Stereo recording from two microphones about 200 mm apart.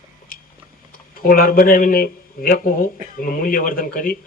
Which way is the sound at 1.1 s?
45° left (ahead or behind).